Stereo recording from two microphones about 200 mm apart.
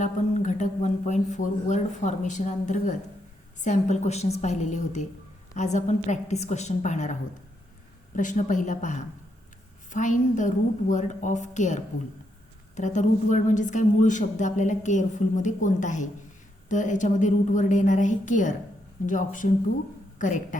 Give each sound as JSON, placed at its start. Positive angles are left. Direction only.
{"t": 0.0, "sound": "a woman's voice", "side_deg": 40}